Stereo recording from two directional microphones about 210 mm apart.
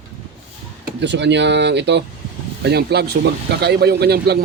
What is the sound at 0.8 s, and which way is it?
Speech, 55° right (ahead or behind).